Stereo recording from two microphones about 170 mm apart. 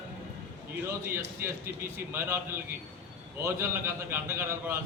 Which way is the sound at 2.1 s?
15° right (ahead or behind).